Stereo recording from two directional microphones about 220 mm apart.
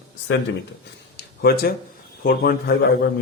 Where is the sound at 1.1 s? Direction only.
45° left (ahead or behind).